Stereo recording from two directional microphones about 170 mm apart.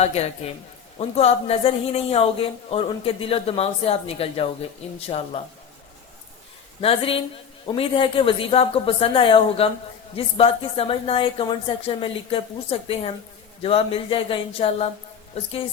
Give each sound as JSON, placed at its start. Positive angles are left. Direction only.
{"t": 0.0, "sound": "a woman's voice", "side_deg": 40}
{"t": 6.8, "sound": "a woman's voice", "side_deg": 35}